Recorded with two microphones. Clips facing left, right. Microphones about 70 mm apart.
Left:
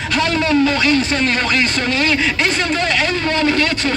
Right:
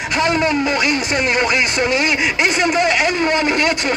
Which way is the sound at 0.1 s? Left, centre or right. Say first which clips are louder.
Even; centre.